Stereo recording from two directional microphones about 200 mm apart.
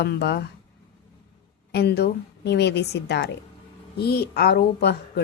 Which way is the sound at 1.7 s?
55° left (ahead or behind).